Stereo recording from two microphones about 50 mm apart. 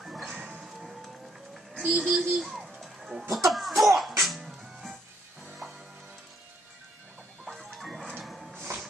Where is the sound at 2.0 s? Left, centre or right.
Centre.